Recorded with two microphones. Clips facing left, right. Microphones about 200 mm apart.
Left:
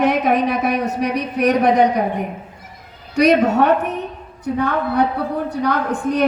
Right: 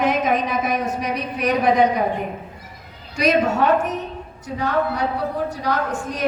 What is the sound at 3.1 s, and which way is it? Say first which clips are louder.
A woman's voice: left 5 dB; 65° left (ahead or behind).